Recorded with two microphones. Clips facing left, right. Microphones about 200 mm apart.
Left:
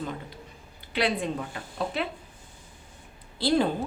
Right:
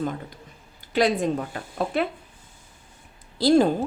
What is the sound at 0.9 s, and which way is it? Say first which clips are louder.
Speech: right 6 dB; 45° right (ahead or behind).